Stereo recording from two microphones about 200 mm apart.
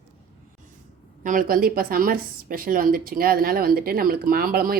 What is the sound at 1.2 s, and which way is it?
A woman's voice, 40° right (ahead or behind).